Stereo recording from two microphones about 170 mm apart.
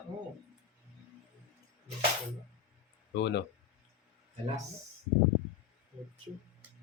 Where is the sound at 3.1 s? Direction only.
90° left.